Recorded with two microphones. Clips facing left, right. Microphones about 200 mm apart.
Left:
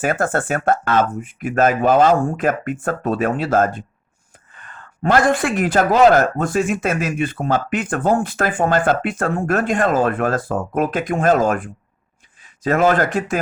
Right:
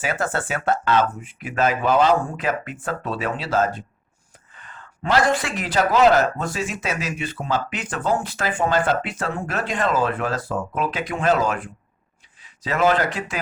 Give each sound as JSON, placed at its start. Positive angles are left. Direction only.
{"t": 0.0, "sound": "a man's voice", "side_deg": 50}